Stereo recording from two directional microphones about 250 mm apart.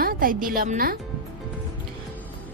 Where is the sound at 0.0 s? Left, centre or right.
Right.